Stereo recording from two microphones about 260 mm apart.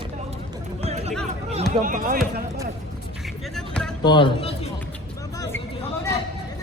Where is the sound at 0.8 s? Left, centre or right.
Right.